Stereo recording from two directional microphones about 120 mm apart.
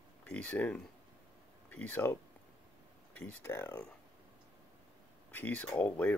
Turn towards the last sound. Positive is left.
turn(degrees=15)  # may be behind; listen again after turning